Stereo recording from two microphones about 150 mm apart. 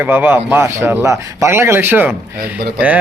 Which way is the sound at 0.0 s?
15° right (ahead or behind).